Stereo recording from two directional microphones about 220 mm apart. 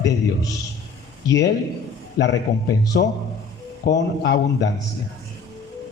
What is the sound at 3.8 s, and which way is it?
Speech, 50° left (ahead or behind).